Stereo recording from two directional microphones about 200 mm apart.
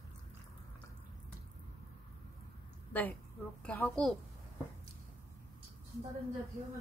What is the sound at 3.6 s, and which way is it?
Speech, 5° left (ahead or behind).